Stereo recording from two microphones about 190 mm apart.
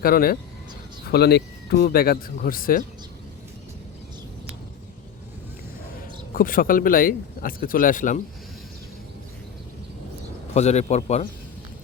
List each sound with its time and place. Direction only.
0.0 s speech: 50° left (ahead or behind)
6.3 s speech: 45° left (ahead or behind)
10.5 s a man's voice: 35° left (ahead or behind)